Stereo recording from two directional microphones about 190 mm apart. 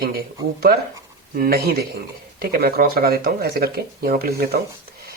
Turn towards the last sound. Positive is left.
turn(degrees=-50)  # may be behind; listen again after turning